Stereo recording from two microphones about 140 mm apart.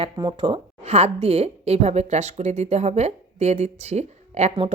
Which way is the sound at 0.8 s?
50° right (ahead or behind).